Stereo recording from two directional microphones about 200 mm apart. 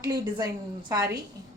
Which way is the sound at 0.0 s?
20° right (ahead or behind).